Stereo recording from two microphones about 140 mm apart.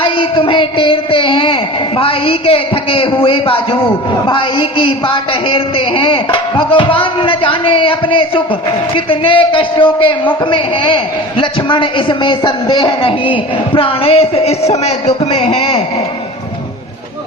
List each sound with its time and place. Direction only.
0.0 s child singing: 40° left (ahead or behind)
2.0 s a man's voice: 40° left (ahead or behind)